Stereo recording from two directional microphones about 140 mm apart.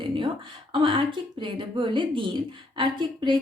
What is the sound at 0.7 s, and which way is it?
A woman's voice, 35° right (ahead or behind).